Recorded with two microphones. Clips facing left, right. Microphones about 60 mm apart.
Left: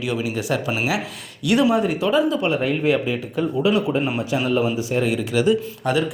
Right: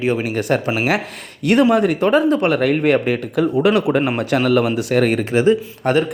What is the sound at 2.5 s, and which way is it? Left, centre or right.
Speech, right.